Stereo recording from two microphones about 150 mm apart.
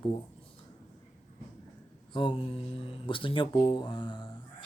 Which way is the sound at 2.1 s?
35° left (ahead or behind).